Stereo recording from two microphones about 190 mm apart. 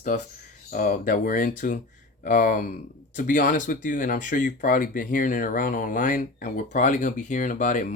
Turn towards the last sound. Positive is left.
turn(degrees=40)  # may be behind; listen again after turning